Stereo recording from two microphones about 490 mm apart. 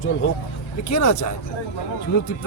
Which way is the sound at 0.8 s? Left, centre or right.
Left.